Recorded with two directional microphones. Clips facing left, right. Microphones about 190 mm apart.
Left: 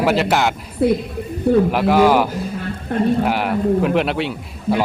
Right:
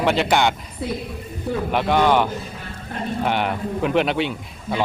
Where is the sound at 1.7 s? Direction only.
5° left (ahead or behind).